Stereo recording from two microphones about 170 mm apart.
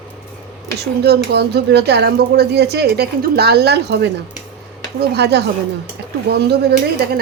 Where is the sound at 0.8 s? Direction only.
70° right (ahead or behind).